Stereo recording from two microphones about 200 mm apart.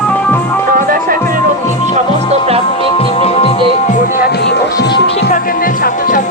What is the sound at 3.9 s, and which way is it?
Music, 55° left (ahead or behind).